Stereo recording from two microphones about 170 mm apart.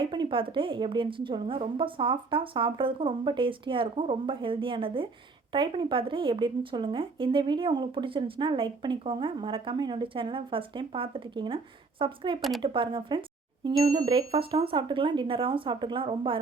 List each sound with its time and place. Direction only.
0.0 s a woman's voice: 30° right (ahead or behind)
12.4 s speech: centre (ahead or behind)
12.6 s speech: 30° right (ahead or behind)